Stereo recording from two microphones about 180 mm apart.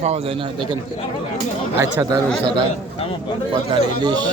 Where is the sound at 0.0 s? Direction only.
35° right (ahead or behind).